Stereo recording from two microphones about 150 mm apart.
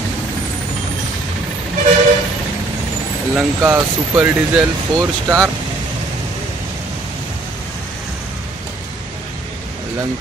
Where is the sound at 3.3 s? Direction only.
10° right (ahead or behind).